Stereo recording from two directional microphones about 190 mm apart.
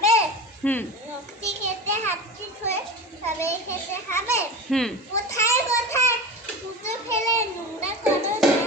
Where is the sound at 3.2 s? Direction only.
15° left (ahead or behind).